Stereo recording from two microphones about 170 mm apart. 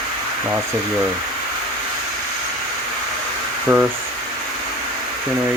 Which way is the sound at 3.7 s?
15° right (ahead or behind).